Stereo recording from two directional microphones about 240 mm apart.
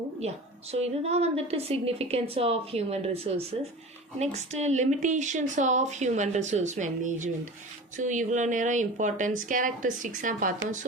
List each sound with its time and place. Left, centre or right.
0.7 s a woman's voice: right